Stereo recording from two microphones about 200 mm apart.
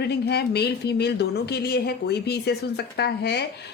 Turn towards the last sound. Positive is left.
turn(degrees=55)  # may be behind; listen again after turning